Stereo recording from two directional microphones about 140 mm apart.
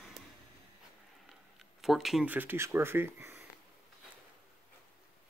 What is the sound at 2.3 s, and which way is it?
Speech, 15° right (ahead or behind).